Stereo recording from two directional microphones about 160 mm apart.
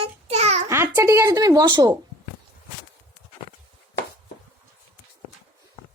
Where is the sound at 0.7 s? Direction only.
15° right (ahead or behind).